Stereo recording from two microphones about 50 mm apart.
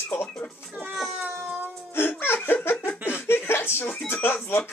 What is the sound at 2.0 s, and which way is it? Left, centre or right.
Speech, left.